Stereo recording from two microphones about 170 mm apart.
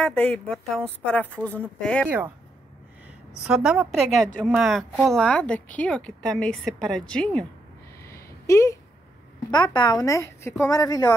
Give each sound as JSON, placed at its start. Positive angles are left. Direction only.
{"t": 0.0, "sound": "a woman's voice", "side_deg": 5}
{"t": 3.4, "sound": "a woman's voice", "side_deg": -5}
{"t": 8.1, "sound": "a sound", "side_deg": 15}
{"t": 9.5, "sound": "speech", "side_deg": 25}